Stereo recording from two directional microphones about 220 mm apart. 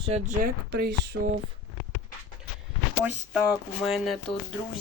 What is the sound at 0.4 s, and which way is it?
Speech, 45° right (ahead or behind).